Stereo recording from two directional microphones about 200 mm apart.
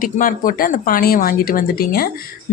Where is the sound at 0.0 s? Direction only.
45° left (ahead or behind).